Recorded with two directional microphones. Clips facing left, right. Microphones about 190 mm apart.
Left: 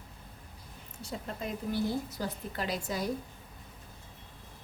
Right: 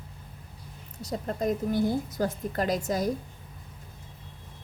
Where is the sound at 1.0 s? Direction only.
40° right (ahead or behind).